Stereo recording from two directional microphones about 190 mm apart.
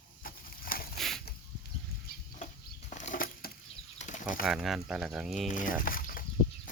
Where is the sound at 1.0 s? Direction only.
Centre (ahead or behind).